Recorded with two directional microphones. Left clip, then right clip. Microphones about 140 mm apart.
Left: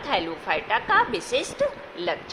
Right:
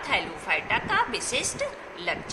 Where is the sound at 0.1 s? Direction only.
55° left (ahead or behind).